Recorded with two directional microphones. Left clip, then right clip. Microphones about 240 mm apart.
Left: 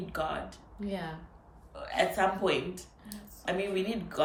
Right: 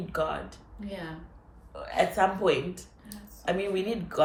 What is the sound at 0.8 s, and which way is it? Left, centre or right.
Speech, centre.